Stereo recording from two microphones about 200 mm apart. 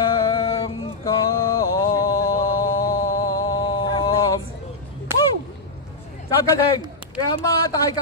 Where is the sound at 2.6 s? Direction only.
15° left (ahead or behind).